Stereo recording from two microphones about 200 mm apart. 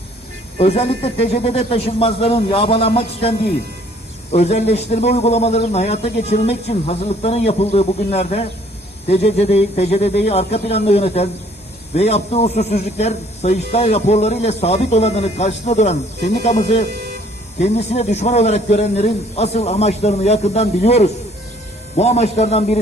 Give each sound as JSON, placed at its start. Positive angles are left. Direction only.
{"t": 0.6, "sound": "a man's voice", "side_deg": 30}